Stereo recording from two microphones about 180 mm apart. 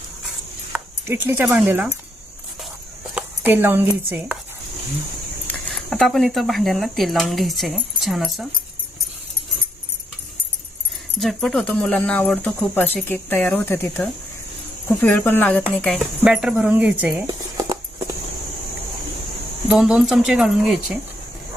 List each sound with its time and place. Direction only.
0.7 s speech: 10° right (ahead or behind)
3.2 s speech: 10° right (ahead or behind)
5.6 s speech: centre (ahead or behind)
11.2 s speech: centre (ahead or behind)
16.2 s speech: 5° right (ahead or behind)
17.2 s a sound: 20° right (ahead or behind)
19.6 s speech: 5° right (ahead or behind)